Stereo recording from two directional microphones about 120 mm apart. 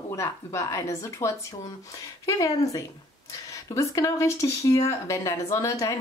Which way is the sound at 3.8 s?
25° left (ahead or behind).